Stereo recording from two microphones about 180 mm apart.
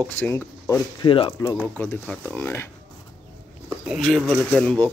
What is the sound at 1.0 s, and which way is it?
Speech, 30° left (ahead or behind).